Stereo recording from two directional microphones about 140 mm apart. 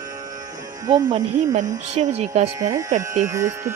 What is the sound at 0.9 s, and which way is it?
Speech, 30° right (ahead or behind).